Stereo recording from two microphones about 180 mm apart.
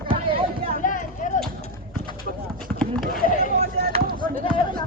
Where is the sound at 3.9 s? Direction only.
35° right (ahead or behind).